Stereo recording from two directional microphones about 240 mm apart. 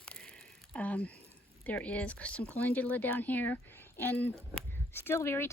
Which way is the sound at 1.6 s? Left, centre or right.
Centre.